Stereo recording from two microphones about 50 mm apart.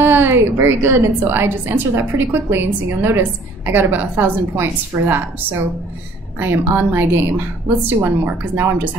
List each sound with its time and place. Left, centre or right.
0.0 s a woman's voice: right